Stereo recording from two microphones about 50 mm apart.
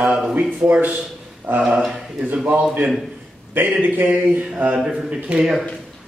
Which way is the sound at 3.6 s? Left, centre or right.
Right.